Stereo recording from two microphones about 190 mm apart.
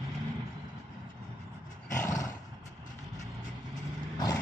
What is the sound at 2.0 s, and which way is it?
Roar, 15° left (ahead or behind).